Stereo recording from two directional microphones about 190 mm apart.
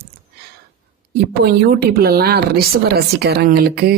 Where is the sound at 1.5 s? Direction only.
55° right (ahead or behind).